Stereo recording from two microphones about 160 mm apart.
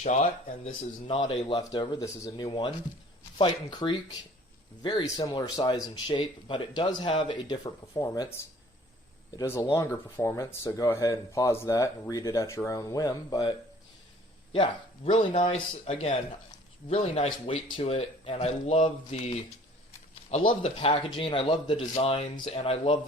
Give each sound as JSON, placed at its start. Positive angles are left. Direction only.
{"t": 0.0, "sound": "speech", "side_deg": 45}
{"t": 1.0, "sound": "speech", "side_deg": 35}
{"t": 7.5, "sound": "speech", "side_deg": 20}
{"t": 9.3, "sound": "speech", "side_deg": 20}
{"t": 20.5, "sound": "speech", "side_deg": 35}